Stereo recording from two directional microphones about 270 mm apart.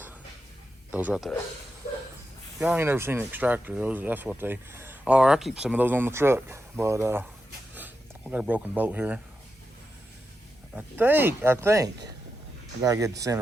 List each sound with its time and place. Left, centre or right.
0.9 s a man's voice: centre
2.6 s speech: centre
8.3 s speech: centre
10.8 s speech: centre